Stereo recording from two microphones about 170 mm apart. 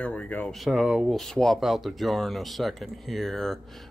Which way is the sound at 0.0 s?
5° left (ahead or behind).